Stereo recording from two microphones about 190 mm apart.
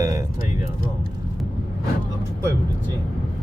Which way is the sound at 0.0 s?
15° right (ahead or behind).